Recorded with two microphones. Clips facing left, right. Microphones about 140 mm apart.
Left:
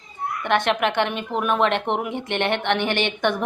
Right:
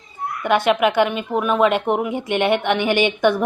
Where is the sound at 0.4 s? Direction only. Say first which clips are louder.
Right 4 dB; 5° right (ahead or behind).